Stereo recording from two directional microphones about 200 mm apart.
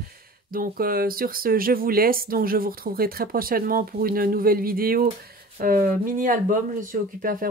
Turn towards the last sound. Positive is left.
turn(degrees=-45)  # may be behind; listen again after turning